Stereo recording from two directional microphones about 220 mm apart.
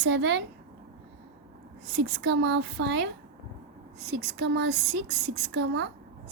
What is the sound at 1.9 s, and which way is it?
A woman's voice, 50° right (ahead or behind).